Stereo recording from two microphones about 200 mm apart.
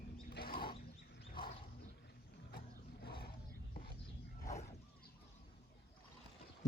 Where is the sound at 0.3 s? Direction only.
50° left (ahead or behind).